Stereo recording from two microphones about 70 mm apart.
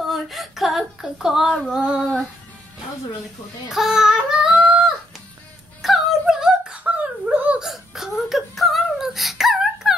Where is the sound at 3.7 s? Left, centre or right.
Centre.